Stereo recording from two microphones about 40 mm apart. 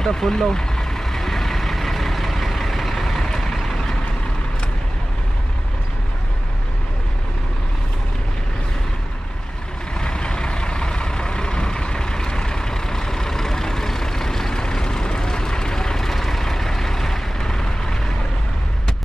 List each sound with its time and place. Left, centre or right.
0.0 s vehicle: centre
9.9 s vehicle: centre